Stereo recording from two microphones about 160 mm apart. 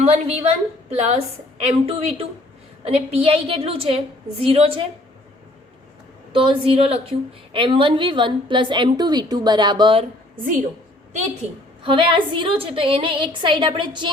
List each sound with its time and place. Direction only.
0.0 s a woman's voice: 40° right (ahead or behind)
6.3 s a woman's voice: 35° right (ahead or behind)
11.4 s a woman's voice: 40° right (ahead or behind)